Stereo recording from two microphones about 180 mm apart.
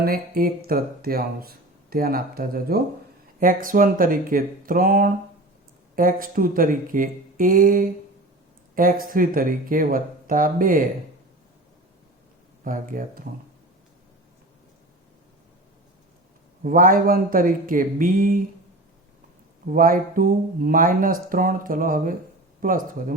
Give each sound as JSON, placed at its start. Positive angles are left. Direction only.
{"t": 0.0, "sound": "speech", "side_deg": -55}
{"t": 12.6, "sound": "speech", "side_deg": -50}
{"t": 16.6, "sound": "speech", "side_deg": -50}
{"t": 19.7, "sound": "speech", "side_deg": -50}